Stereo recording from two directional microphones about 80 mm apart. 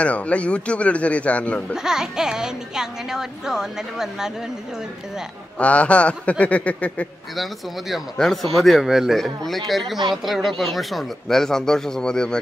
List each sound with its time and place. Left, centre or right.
0.0 s a man's voice: centre
1.7 s speech: centre
5.6 s a man's voice: centre
7.9 s speech: centre